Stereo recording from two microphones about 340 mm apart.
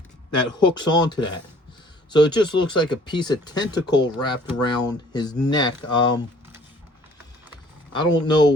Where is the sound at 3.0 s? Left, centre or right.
Centre.